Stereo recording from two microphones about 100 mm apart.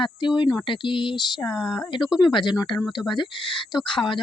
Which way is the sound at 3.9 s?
55° left (ahead or behind).